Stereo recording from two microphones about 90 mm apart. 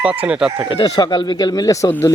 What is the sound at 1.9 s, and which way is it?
Speech, 25° left (ahead or behind).